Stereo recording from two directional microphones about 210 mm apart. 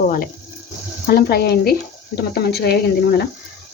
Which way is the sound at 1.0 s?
50° left (ahead or behind).